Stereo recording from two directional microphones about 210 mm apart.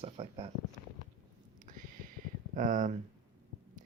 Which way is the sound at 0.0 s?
30° right (ahead or behind).